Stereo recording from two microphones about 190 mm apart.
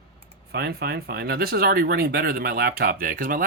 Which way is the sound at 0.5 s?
60° right (ahead or behind).